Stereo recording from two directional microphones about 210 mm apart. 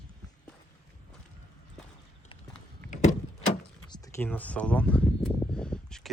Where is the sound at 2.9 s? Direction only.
35° left (ahead or behind).